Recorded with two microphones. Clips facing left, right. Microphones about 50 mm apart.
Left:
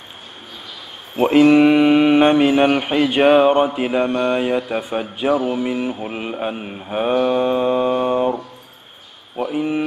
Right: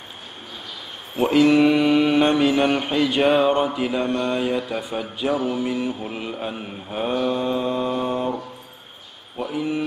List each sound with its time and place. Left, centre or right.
1.2 s mantra: left
9.4 s mantra: left